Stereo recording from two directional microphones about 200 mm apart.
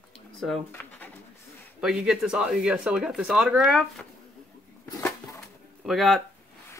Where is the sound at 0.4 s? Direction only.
5° left (ahead or behind).